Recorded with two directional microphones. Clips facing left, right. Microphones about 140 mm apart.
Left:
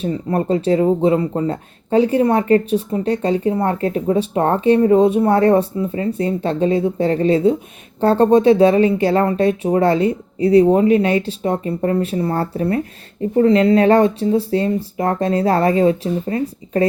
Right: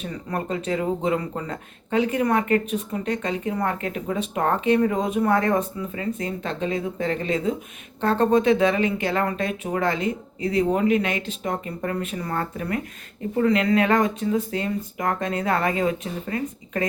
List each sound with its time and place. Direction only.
0.0 s speech: 30° left (ahead or behind)